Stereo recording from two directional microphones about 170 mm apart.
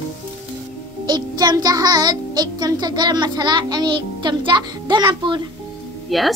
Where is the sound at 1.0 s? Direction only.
25° right (ahead or behind).